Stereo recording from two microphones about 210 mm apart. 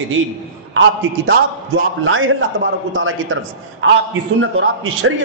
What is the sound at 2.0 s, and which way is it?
A man's voice, 70° right (ahead or behind).